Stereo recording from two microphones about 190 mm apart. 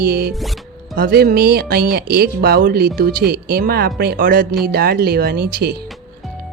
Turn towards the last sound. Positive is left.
turn(degrees=-55)  # may be behind; listen again after turning